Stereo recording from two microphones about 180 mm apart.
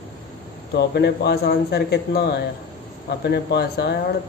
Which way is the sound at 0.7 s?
65° left (ahead or behind).